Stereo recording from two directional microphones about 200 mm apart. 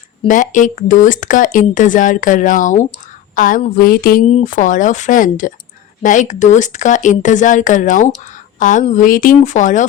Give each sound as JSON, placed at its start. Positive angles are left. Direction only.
{"t": 0.3, "sound": "speech", "side_deg": 40}
{"t": 3.8, "sound": "a sound", "side_deg": 45}
{"t": 4.3, "sound": "a woman's voice", "side_deg": 35}